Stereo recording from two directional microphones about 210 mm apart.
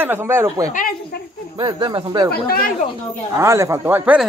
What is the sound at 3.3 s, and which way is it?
Speech, 15° right (ahead or behind).